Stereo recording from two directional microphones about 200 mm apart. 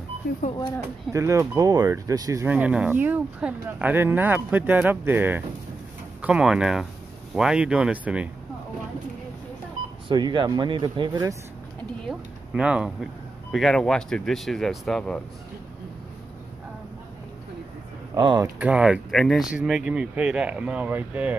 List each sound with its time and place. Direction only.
1.1 s speech: 15° right (ahead or behind)
10.0 s speech: 20° right (ahead or behind)
12.1 s speech: 5° right (ahead or behind)
18.1 s speech: 20° right (ahead or behind)
18.6 s speech: 5° right (ahead or behind)